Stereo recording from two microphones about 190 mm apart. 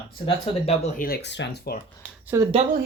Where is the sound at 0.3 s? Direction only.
30° left (ahead or behind).